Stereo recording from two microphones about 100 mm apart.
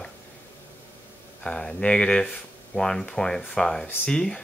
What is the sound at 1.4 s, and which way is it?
Speech, 10° left (ahead or behind).